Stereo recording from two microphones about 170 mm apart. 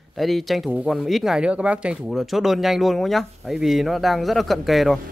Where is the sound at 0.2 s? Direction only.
Centre (ahead or behind).